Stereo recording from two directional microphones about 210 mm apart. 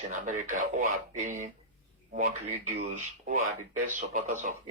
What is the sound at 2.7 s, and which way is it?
Speech, 35° right (ahead or behind).